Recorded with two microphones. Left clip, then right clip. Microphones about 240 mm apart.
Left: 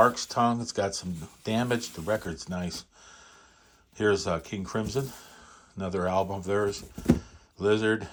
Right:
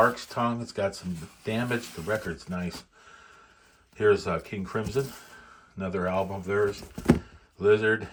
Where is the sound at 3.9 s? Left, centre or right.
Centre.